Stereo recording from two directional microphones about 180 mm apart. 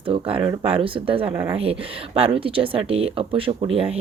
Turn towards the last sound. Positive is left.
turn(degrees=-30)  # may be behind; listen again after turning